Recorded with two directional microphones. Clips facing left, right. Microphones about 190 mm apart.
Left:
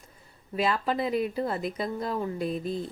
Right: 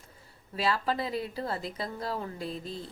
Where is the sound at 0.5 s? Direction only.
20° left (ahead or behind).